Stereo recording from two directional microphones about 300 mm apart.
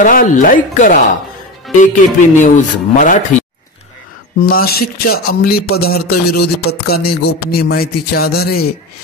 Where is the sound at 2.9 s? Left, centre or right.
Left.